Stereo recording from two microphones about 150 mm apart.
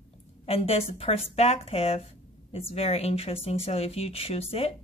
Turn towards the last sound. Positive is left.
turn(degrees=40)  # may be behind; listen again after turning